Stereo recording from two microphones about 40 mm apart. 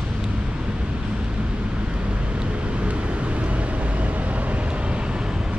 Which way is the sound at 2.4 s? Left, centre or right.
Right.